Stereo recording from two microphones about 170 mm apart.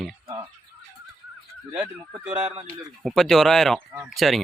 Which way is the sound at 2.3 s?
30° right (ahead or behind).